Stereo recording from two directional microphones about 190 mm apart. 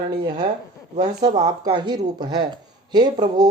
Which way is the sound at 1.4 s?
25° right (ahead or behind).